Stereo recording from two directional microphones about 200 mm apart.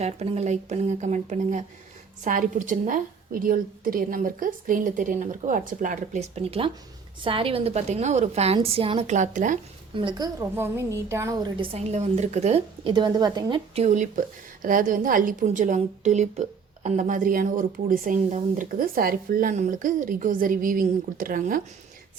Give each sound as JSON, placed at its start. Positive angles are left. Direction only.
{"t": 0.0, "sound": "a woman's voice", "side_deg": -35}
{"t": 9.9, "sound": "a woman's voice", "side_deg": -25}